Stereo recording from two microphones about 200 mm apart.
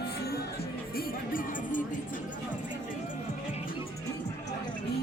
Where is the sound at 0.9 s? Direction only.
45° left (ahead or behind).